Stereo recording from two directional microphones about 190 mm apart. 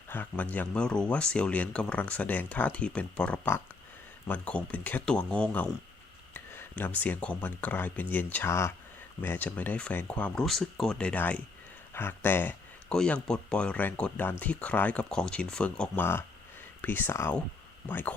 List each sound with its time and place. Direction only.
0.1 s speech: 10° left (ahead or behind)